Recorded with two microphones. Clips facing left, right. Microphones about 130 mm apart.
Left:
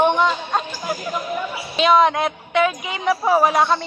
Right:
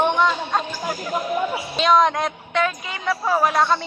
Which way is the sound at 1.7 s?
5° left (ahead or behind).